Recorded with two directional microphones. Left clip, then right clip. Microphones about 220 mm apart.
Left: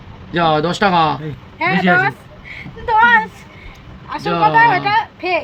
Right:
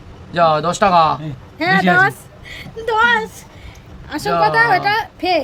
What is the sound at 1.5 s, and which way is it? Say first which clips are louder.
A woman's voice: right 1 dB; 45° right (ahead or behind).